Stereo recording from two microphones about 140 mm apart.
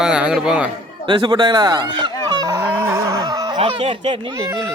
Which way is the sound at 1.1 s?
35° right (ahead or behind).